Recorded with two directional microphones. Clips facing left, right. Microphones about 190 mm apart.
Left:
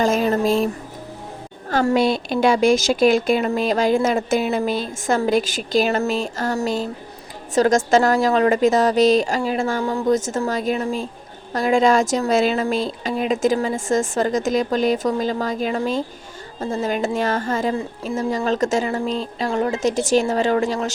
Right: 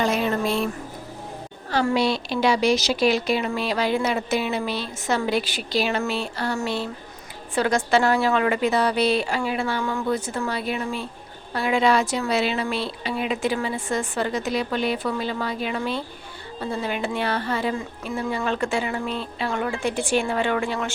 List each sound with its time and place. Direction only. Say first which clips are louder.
0.0 s speech: left 4 dB; 40° left (ahead or behind)
1.7 s a woman's voice: left 4 dB; 45° left (ahead or behind)